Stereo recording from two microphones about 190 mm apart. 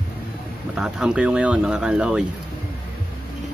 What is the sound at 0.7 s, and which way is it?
Speech, 5° right (ahead or behind).